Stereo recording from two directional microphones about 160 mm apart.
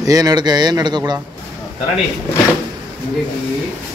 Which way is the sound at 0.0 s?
20° right (ahead or behind).